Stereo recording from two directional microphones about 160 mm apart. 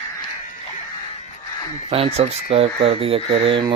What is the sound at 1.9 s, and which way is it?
Speech, 40° right (ahead or behind).